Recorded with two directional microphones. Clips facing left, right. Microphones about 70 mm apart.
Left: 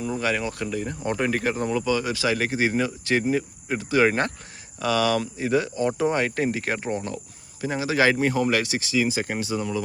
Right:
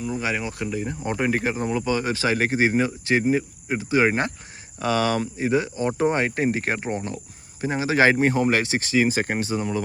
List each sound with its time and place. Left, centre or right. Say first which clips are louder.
0.2 s speech: left 1 dB; centre
1.8 s speech: right 1 dB; right
4.8 s speech: even; right
8.8 s speech: right 3 dB; right